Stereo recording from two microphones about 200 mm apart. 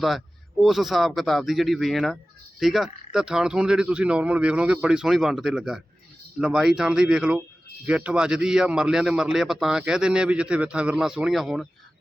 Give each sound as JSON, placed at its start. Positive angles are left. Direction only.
{"t": 0.6, "sound": "a man's voice", "side_deg": 0}